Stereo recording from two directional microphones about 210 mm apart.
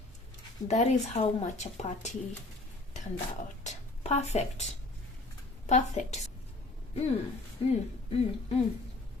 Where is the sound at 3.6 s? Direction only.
30° left (ahead or behind).